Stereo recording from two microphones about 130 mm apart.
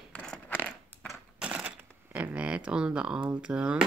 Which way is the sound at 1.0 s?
10° right (ahead or behind).